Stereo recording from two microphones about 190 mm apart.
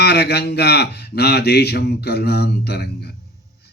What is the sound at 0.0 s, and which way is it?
Speech, 60° left (ahead or behind).